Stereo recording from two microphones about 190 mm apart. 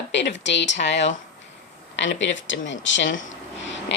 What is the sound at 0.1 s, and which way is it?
Speech, 70° left (ahead or behind).